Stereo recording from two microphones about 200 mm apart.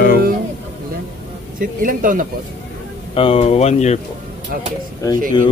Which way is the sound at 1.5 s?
45° right (ahead or behind).